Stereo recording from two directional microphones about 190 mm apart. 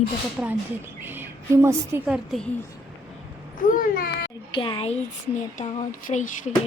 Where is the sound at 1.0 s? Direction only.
10° right (ahead or behind).